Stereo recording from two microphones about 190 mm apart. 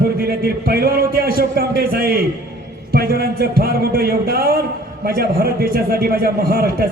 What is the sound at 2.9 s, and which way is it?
A man's voice, 55° right (ahead or behind).